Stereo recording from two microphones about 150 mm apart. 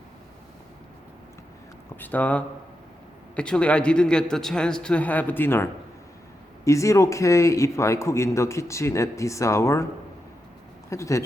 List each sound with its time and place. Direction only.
2.0 s a man's voice: 10° left (ahead or behind)
6.7 s a man's voice: 20° left (ahead or behind)
10.8 s speech: 20° left (ahead or behind)